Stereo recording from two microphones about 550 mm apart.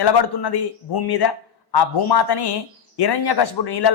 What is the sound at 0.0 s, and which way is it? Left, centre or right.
Speech, left.